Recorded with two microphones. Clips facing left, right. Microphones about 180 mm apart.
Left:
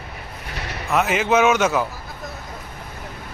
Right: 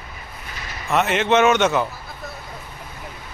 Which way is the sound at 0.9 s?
Centre (ahead or behind).